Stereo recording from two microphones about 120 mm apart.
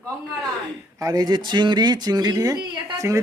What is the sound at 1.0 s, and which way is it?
A man's voice, 30° right (ahead or behind).